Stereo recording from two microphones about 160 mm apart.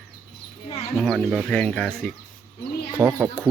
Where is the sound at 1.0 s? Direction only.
Centre (ahead or behind).